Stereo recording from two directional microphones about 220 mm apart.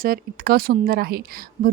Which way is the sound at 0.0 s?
40° right (ahead or behind).